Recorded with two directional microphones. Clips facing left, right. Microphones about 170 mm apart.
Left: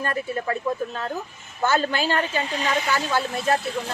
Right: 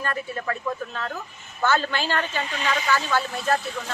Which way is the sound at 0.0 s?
30° left (ahead or behind).